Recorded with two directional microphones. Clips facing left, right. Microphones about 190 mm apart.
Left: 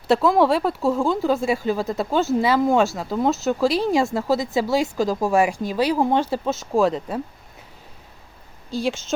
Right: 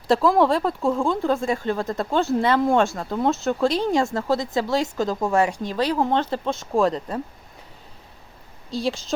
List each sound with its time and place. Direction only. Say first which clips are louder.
0.1 s speech: left 1 dB; centre (ahead or behind)